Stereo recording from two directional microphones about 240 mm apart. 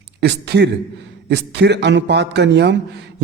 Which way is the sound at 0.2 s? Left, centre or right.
Right.